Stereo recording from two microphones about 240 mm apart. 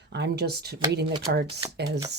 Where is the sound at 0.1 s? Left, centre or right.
Right.